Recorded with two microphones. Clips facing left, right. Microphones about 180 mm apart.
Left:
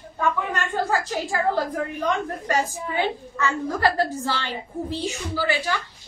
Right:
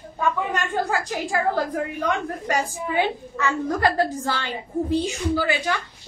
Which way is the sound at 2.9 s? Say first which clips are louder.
Right 2 dB; 15° right (ahead or behind).